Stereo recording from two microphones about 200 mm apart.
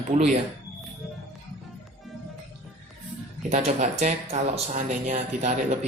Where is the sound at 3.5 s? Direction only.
35° right (ahead or behind).